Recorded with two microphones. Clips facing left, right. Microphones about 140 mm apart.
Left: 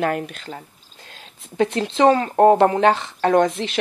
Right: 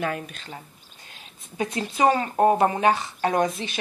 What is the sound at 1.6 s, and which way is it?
Speech, 75° left (ahead or behind).